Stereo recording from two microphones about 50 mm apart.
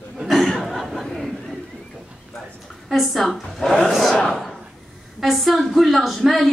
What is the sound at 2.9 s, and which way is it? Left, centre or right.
A woman's voice, centre.